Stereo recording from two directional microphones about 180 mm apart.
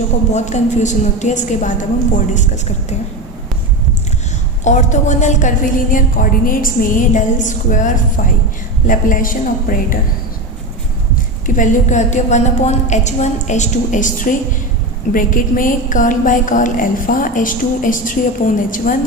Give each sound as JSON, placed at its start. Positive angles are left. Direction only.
{"t": 0.3, "sound": "a woman's voice", "side_deg": 40}
{"t": 4.6, "sound": "a woman's voice", "side_deg": 40}
{"t": 11.1, "sound": "a woman's voice", "side_deg": 45}